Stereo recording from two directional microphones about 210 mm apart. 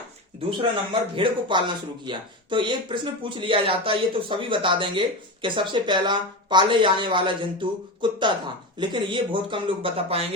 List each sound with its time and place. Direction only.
1.1 s speech: 25° right (ahead or behind)